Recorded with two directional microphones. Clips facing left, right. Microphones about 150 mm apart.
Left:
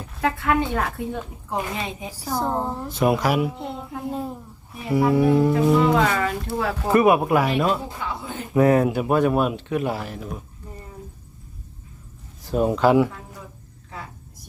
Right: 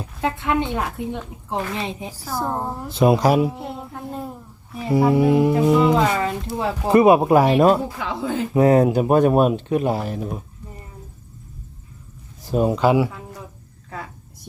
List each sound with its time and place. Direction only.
0.2 s a woman's voice: 20° right (ahead or behind)
1.8 s speech: 30° right (ahead or behind)
2.4 s speech: 5° right (ahead or behind)
2.9 s a woman's voice: 25° right (ahead or behind)
3.6 s child singing: 5° right (ahead or behind)
4.9 s a woman's voice: 20° right (ahead or behind); by 7.8 s 40° right (ahead or behind)
7.9 s speech: 90° right
8.5 s speech: 30° right (ahead or behind)
12.5 s speech: 10° right (ahead or behind)